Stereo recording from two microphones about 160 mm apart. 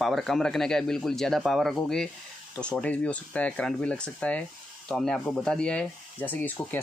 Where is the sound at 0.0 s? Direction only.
Centre (ahead or behind).